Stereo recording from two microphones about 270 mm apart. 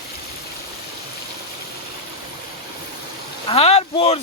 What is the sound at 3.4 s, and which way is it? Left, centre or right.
Speech, left.